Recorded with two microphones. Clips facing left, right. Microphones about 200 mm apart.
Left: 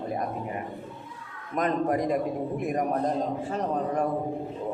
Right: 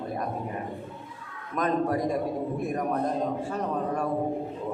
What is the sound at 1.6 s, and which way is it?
Speech, 20° left (ahead or behind).